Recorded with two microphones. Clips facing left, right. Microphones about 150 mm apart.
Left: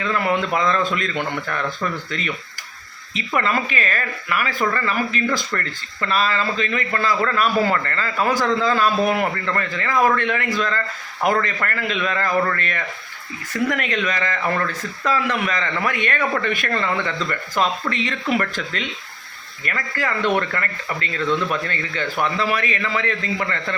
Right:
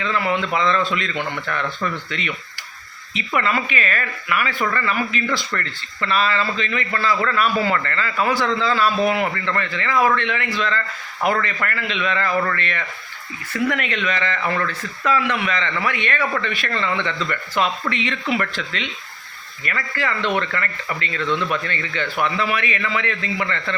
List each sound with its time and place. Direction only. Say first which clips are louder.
0.3 s speech: even; 45° left (ahead or behind)